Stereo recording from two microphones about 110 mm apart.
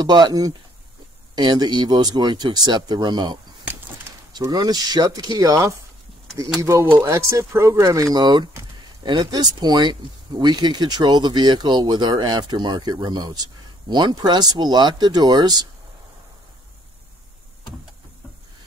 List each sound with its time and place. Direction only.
0.0 s speech: 40° right (ahead or behind)